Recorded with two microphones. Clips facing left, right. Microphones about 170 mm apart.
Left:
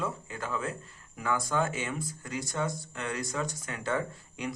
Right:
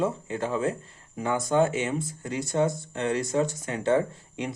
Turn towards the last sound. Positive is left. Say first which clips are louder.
# right 5 dB
turn(degrees=-25)  # may be behind; listen again after turning